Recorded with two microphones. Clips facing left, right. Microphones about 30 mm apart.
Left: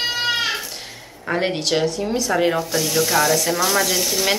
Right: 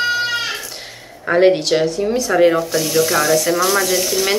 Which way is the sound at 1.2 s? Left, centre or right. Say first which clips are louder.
Right 9 dB; centre.